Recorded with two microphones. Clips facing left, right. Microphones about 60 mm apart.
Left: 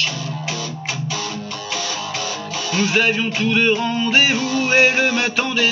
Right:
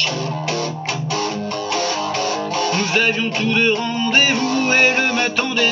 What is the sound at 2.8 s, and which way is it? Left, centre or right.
Music, centre.